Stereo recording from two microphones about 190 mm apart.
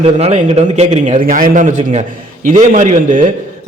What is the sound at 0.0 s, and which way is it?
A man's voice, 35° right (ahead or behind).